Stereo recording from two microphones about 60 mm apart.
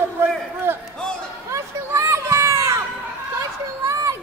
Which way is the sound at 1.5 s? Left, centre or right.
Right.